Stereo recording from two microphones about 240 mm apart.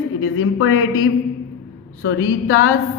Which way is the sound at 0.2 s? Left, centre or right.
Left.